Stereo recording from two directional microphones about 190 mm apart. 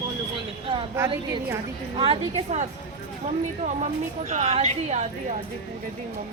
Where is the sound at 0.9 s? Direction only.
15° right (ahead or behind).